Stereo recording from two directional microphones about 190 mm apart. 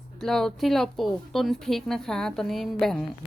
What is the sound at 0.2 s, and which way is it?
A woman's voice, centre (ahead or behind).